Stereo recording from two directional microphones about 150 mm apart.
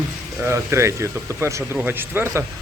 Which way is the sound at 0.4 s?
20° right (ahead or behind).